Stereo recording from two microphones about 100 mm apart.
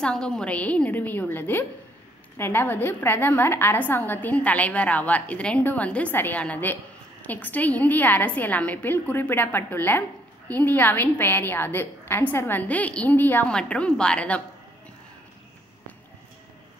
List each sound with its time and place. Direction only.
0.0 s a woman's voice: 10° left (ahead or behind)